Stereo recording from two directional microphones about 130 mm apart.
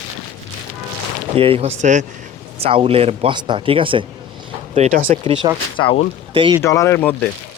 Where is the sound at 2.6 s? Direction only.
45° right (ahead or behind).